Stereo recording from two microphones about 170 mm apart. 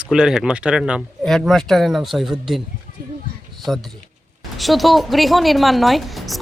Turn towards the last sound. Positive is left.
turn(degrees=0)  # may be behind; listen again after turning